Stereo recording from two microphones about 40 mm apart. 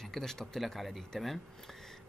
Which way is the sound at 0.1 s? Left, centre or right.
Centre.